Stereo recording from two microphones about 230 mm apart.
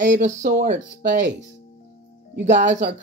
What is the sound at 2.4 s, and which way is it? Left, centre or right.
Speech, right.